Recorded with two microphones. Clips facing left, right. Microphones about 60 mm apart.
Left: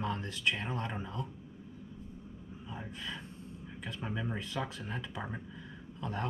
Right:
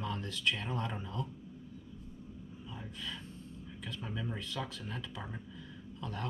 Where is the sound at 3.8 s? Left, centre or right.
Left.